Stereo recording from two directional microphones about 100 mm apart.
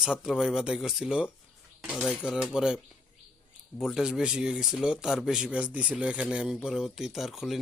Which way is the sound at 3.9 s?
5° right (ahead or behind).